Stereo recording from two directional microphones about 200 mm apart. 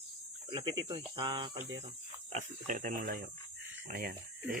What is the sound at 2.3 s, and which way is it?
Speech, 40° right (ahead or behind).